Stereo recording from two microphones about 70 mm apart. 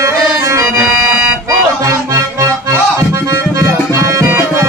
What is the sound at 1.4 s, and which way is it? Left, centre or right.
Music, right.